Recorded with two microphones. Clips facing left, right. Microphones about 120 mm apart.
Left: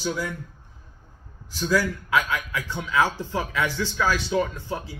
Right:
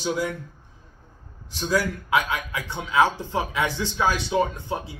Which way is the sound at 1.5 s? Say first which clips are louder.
Left 1 dB; 25° right (ahead or behind).